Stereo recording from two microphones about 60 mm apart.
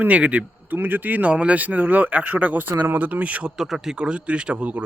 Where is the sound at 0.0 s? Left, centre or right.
Right.